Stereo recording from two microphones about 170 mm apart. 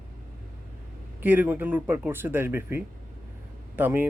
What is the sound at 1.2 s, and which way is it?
Speech, 10° right (ahead or behind).